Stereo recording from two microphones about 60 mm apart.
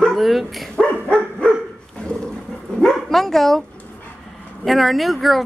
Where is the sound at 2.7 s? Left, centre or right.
Centre.